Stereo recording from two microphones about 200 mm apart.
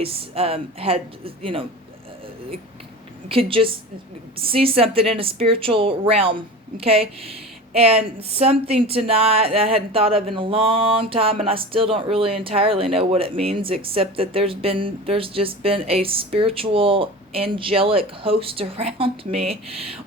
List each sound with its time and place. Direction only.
0.0 s a woman's voice: 30° right (ahead or behind)
3.2 s a woman's voice: 25° right (ahead or behind)